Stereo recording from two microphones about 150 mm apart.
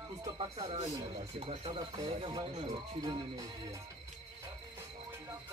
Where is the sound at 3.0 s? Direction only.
25° right (ahead or behind).